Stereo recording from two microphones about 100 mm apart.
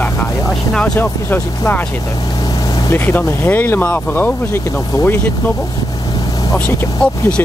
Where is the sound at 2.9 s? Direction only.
20° left (ahead or behind).